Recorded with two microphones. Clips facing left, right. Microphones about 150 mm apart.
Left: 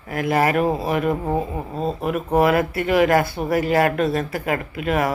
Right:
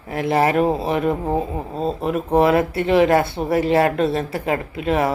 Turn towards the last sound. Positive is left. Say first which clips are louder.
# right 2 dB
turn(degrees=-25)  # may be behind; listen again after turning